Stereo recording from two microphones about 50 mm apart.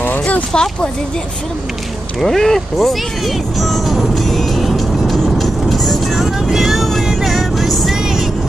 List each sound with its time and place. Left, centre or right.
0.0 s a sound: left
0.5 s speech: centre
2.1 s music: centre